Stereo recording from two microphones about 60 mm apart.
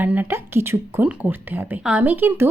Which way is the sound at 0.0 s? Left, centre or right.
Right.